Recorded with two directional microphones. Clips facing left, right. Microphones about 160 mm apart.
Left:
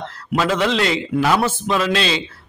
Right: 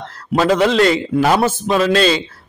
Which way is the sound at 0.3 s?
40° right (ahead or behind).